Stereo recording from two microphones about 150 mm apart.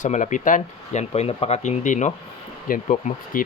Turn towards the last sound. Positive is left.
turn(degrees=60)  # may be behind; listen again after turning